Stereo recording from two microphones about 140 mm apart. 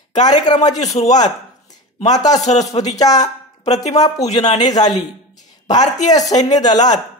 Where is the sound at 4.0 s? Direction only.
25° left (ahead or behind).